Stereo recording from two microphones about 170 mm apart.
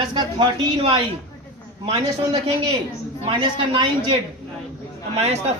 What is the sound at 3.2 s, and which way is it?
A woman's voice, 30° right (ahead or behind).